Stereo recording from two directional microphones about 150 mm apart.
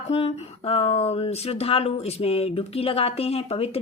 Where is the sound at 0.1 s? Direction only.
45° left (ahead or behind).